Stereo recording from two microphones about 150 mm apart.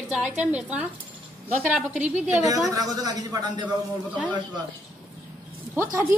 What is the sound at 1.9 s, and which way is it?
Speech, 55° right (ahead or behind).